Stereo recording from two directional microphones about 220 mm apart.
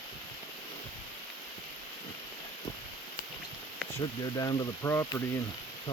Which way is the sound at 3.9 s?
20° left (ahead or behind).